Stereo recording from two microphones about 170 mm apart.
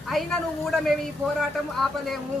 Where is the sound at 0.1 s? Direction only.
Centre (ahead or behind).